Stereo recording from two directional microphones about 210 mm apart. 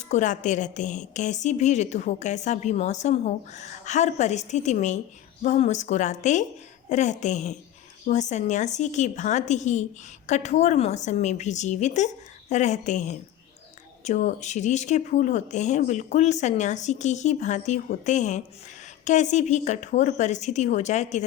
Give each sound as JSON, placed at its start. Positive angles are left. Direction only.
{"t": 0.1, "sound": "a woman's voice", "side_deg": 35}